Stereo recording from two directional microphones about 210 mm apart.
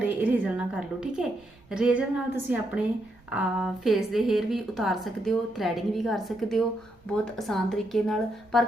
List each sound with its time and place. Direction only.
0.2 s a woman's voice: 5° right (ahead or behind)